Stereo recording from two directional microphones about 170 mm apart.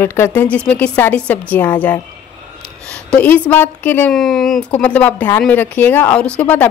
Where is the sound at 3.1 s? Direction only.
10° left (ahead or behind).